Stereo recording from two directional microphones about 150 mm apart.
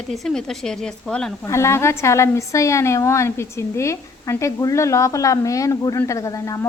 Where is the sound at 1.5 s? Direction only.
20° left (ahead or behind).